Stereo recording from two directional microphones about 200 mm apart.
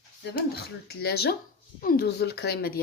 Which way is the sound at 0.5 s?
50° left (ahead or behind).